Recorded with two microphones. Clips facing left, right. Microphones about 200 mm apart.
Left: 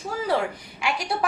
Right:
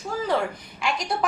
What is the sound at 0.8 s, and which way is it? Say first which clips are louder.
Speech: even; 5° left (ahead or behind).